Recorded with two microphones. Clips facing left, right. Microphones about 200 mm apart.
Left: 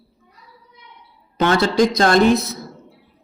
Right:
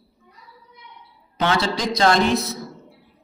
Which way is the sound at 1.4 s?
50° left (ahead or behind).